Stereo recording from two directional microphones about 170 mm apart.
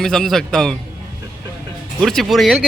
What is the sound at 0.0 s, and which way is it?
Speech, centre (ahead or behind).